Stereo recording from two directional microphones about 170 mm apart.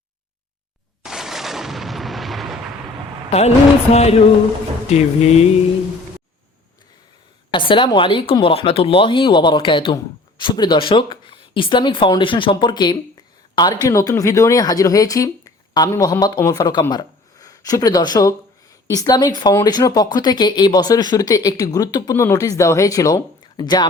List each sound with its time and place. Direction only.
1.0 s artillery fire: 5° right (ahead or behind)
3.2 s a woman's voice: 40° left (ahead or behind)
7.5 s speech: 30° left (ahead or behind)